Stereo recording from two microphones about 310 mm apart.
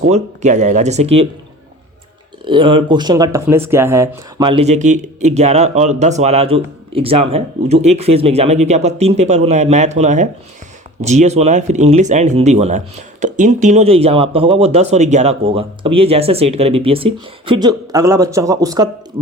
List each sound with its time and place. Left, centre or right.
0.1 s speech: right
2.4 s speech: centre